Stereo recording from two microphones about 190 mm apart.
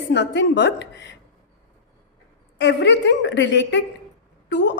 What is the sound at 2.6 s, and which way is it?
A woman's voice, 65° left (ahead or behind).